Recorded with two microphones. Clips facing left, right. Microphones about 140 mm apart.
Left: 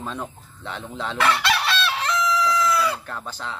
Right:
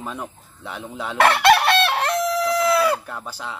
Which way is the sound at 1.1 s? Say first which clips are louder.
Right 7 dB; 60° right (ahead or behind).